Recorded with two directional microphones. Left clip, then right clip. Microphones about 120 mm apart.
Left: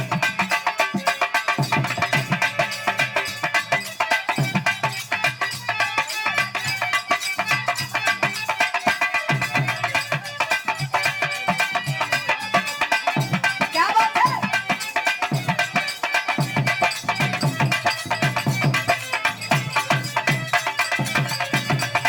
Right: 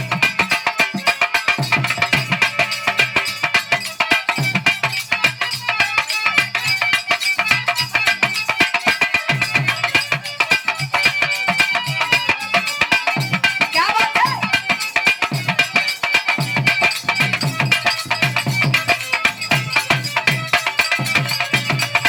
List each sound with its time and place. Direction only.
0.1 s music: 15° right (ahead or behind)